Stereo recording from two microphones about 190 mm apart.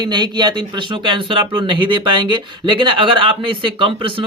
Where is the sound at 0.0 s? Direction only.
20° right (ahead or behind).